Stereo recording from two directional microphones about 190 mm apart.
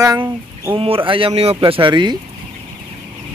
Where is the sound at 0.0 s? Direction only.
15° right (ahead or behind).